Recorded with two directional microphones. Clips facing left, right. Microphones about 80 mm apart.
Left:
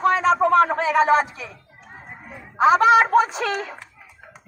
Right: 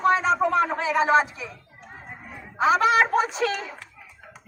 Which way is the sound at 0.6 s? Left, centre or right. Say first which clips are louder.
Left 5 dB; left.